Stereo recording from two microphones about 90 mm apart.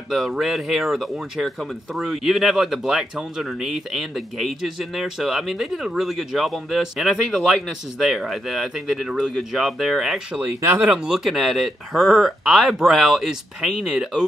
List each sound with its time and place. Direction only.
0.1 s speech: centre (ahead or behind)
11.1 s speech: 5° right (ahead or behind)